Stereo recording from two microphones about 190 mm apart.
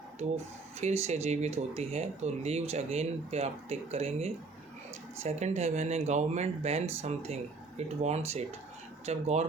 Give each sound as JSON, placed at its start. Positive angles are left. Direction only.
{"t": 0.2, "sound": "speech", "side_deg": -35}